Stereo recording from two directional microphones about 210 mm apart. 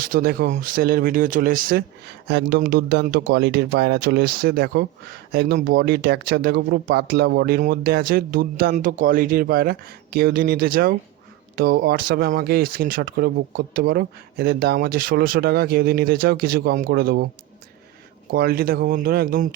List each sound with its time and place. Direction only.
0.0 s speech: 45° right (ahead or behind)
18.3 s speech: 45° right (ahead or behind)